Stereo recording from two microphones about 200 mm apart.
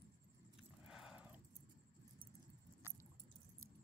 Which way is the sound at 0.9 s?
5° right (ahead or behind).